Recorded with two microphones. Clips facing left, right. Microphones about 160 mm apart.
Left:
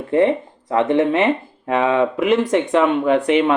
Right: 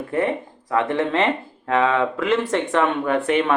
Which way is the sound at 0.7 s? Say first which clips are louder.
Left 5 dB; 20° left (ahead or behind).